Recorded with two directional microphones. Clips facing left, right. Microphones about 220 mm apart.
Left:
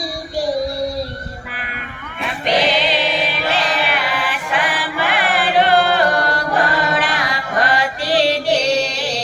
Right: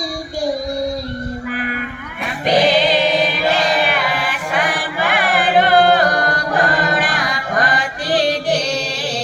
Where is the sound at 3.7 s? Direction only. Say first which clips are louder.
Right 2 dB; 45° right (ahead or behind).